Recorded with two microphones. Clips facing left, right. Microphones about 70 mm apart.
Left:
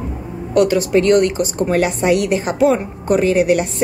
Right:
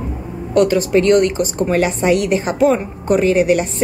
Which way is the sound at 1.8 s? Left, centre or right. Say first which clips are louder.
Right 1 dB; right.